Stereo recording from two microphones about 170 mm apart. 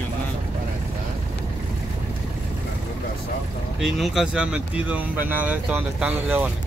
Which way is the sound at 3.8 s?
Centre (ahead or behind).